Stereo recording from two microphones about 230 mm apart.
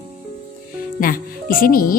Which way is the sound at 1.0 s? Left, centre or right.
Left.